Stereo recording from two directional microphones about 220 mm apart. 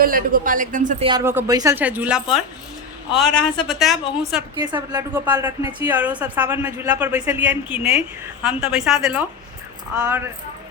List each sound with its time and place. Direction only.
0.0 s a man's voice: 40° right (ahead or behind)
1.0 s a woman's voice: 15° right (ahead or behind)
3.7 s a woman's voice: centre (ahead or behind)
4.6 s a woman's voice: 20° right (ahead or behind)